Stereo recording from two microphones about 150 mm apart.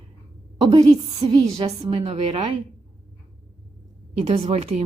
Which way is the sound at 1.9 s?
40° right (ahead or behind).